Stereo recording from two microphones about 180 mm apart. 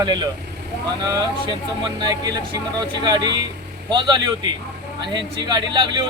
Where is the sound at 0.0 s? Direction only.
25° right (ahead or behind).